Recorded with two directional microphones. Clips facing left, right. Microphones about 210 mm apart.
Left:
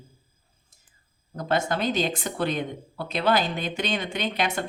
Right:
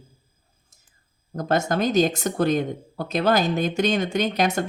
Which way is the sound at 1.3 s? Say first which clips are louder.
Right 3 dB; 45° right (ahead or behind).